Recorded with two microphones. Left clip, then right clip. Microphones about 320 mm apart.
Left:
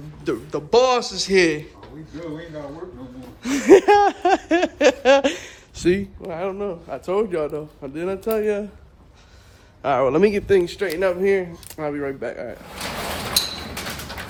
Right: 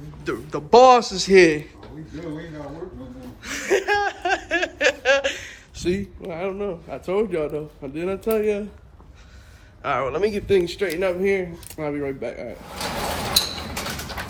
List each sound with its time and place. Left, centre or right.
0.3 s a man's voice: centre
3.4 s laughter: centre
5.8 s laughter: left
6.2 s a man's voice: centre
9.8 s speech: centre
10.1 s laughter: left
10.4 s a man's voice: centre
13.4 s a sound: centre